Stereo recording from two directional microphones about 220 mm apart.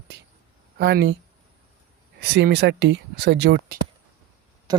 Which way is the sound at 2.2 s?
50° right (ahead or behind).